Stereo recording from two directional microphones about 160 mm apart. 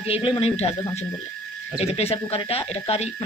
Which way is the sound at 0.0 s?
35° left (ahead or behind).